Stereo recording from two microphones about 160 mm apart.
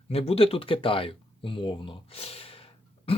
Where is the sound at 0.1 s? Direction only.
40° left (ahead or behind).